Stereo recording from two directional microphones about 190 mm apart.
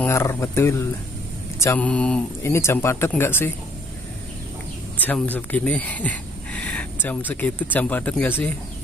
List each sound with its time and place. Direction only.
0.0 s speech: 15° left (ahead or behind)
4.9 s speech: 10° left (ahead or behind)